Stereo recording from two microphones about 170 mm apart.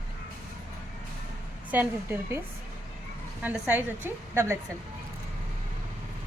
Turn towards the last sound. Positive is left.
turn(degrees=-15)  # may be behind; listen again after turning